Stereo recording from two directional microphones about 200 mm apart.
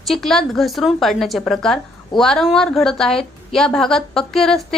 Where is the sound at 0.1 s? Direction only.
Centre (ahead or behind).